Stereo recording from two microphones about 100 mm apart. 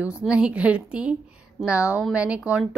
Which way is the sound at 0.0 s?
10° right (ahead or behind).